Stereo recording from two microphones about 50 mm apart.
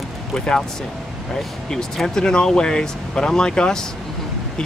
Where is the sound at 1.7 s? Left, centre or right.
Centre.